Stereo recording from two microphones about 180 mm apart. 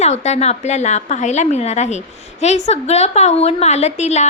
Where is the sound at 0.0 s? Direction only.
40° left (ahead or behind).